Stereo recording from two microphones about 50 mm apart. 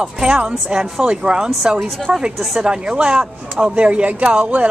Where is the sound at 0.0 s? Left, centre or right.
Centre.